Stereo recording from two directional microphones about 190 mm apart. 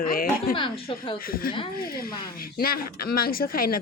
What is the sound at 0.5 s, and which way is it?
Speech, 25° left (ahead or behind).